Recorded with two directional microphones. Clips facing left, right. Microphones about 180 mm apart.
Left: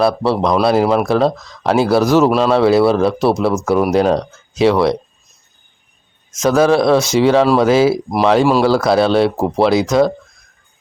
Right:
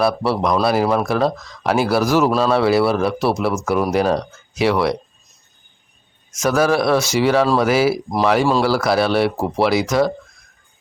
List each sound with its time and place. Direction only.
0.0 s speech: 25° left (ahead or behind)
6.4 s speech: 20° left (ahead or behind)